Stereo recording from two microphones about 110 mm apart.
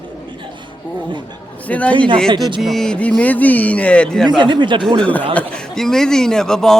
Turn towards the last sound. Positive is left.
turn(degrees=5)  # may be behind; listen again after turning